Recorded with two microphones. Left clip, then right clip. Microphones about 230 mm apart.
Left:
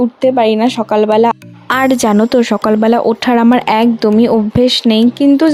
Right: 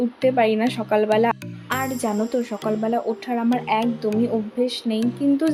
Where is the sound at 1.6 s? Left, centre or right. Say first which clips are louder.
Left 13 dB; left.